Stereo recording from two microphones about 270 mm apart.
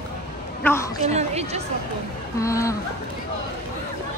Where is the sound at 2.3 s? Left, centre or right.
Centre.